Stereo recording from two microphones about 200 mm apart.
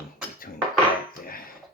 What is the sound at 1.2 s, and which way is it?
Dishes, 45° left (ahead or behind).